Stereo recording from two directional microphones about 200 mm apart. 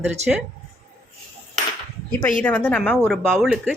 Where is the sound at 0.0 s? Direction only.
5° right (ahead or behind).